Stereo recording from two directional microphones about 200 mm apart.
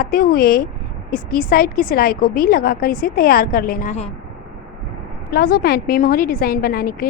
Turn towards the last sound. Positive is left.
turn(degrees=50)  # may be behind; listen again after turning